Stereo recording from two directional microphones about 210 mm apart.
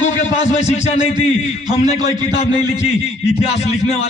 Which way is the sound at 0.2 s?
30° left (ahead or behind).